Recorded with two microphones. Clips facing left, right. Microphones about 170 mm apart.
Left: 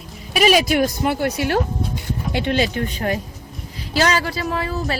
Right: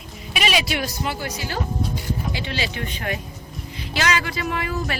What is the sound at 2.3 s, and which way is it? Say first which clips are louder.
A woman's voice: left 8 dB; 55° left (ahead or behind).